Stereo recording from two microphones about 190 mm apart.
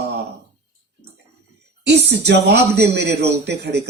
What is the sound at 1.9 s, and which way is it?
Speech, 60° right (ahead or behind).